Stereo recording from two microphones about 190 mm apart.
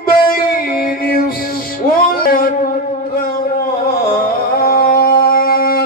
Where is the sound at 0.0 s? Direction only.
50° left (ahead or behind).